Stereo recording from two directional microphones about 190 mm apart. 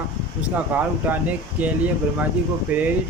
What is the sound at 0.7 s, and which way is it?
Speech, 10° right (ahead or behind).